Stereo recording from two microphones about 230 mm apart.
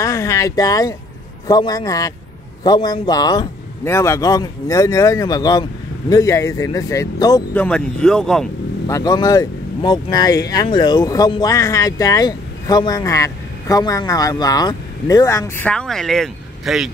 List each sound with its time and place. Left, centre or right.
0.0 s speech: centre
8.8 s speech: centre